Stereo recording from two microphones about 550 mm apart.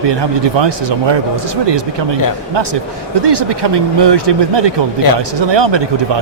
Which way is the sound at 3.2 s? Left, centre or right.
Right.